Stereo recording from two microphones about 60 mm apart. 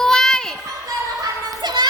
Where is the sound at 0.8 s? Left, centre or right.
Right.